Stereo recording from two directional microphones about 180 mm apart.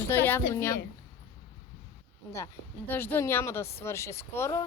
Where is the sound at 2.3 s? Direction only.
15° left (ahead or behind).